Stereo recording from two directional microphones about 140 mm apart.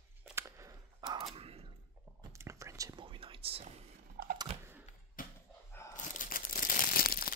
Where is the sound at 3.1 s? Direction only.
40° right (ahead or behind).